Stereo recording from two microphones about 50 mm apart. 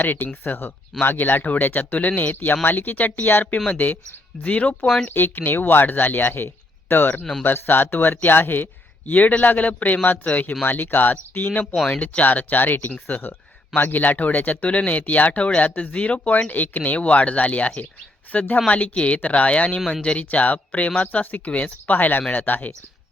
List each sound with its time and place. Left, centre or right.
0.0 s speech: left
5.0 s speech: left
11.6 s speech: centre
11.9 s speech: left